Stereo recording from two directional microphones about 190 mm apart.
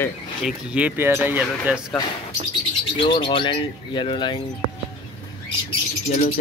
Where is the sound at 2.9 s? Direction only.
25° left (ahead or behind).